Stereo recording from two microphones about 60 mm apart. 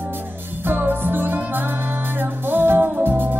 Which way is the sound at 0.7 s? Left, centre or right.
Right.